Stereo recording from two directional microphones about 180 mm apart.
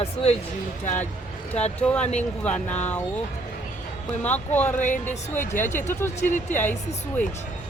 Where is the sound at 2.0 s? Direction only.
40° left (ahead or behind).